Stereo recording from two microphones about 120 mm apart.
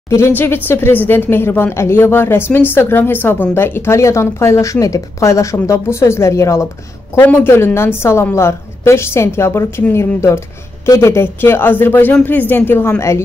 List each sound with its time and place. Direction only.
0.4 s a woman's voice: 20° left (ahead or behind)